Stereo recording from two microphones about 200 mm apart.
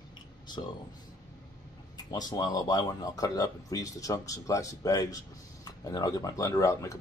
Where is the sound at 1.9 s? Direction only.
20° left (ahead or behind).